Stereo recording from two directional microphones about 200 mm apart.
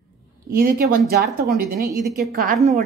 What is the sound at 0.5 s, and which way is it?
A woman's voice, 45° right (ahead or behind).